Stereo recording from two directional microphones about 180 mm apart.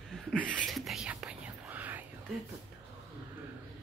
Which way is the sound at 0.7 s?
Centre (ahead or behind).